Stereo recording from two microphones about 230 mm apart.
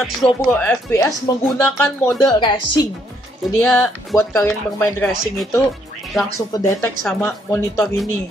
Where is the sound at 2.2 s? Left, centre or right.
Centre.